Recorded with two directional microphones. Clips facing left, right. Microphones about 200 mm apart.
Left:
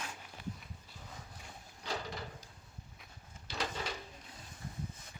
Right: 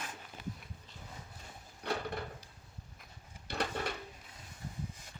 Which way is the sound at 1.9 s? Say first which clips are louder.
Right 4 dB; 60° right (ahead or behind).